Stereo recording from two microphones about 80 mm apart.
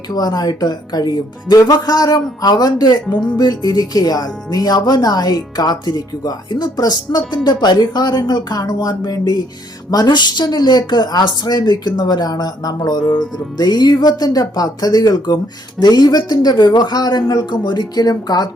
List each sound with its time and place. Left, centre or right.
0.1 s speech: left